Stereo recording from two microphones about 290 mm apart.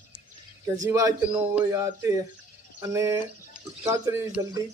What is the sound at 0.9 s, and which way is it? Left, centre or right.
Speech, centre.